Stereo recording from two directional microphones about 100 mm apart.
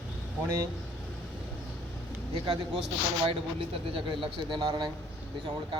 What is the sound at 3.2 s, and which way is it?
Speech, 65° right (ahead or behind).